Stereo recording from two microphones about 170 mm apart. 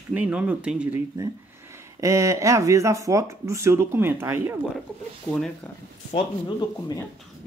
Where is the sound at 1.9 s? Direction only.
20° right (ahead or behind).